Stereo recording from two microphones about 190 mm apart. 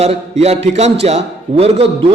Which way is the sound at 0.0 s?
35° right (ahead or behind).